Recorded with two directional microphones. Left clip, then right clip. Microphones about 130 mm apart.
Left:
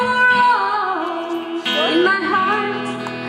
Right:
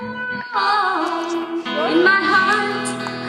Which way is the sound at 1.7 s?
Centre (ahead or behind).